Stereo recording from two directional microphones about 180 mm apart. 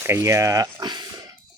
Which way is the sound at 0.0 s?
15° right (ahead or behind).